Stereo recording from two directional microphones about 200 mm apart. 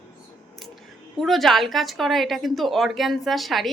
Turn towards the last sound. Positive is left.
turn(degrees=0)  # may be behind; listen again after turning